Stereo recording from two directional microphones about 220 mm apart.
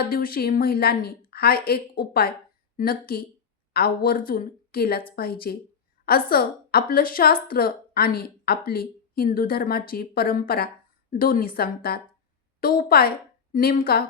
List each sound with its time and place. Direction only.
0.1 s a woman's voice: 40° left (ahead or behind)